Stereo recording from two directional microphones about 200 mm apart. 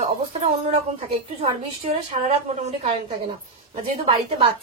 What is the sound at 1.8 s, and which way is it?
A woman's voice, 30° right (ahead or behind).